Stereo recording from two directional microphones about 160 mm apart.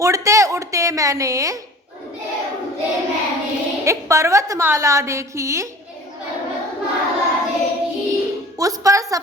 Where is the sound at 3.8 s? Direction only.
20° right (ahead or behind).